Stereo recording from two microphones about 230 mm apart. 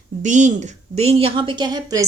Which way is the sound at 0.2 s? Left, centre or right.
Right.